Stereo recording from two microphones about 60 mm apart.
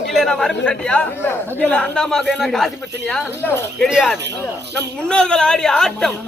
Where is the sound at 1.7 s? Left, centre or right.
Centre.